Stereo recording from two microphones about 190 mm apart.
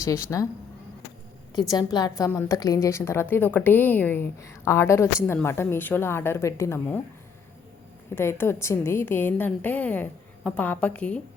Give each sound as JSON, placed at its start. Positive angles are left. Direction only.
{"t": 0.0, "sound": "a woman's voice", "side_deg": 15}
{"t": 1.5, "sound": "a woman's voice", "side_deg": 20}
{"t": 8.1, "sound": "a woman's voice", "side_deg": 10}